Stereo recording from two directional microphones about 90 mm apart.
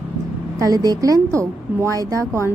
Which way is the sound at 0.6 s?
40° right (ahead or behind).